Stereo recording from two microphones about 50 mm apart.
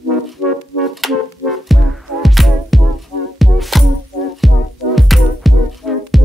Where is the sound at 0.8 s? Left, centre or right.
Centre.